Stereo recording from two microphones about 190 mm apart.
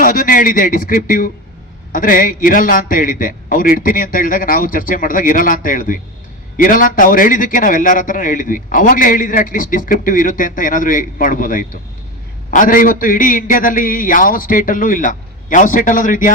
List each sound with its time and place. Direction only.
0.0 s a man's voice: 45° left (ahead or behind)